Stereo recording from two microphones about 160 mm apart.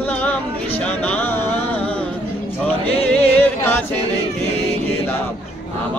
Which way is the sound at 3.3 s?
10° left (ahead or behind).